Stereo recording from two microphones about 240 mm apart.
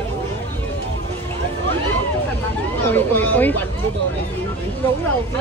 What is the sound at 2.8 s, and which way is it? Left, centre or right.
Speech, centre.